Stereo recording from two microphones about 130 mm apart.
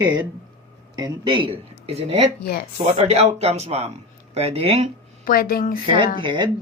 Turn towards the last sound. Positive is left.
turn(degrees=-35)  # may be behind; listen again after turning